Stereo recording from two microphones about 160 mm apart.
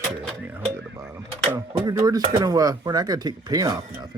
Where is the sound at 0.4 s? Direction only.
10° right (ahead or behind).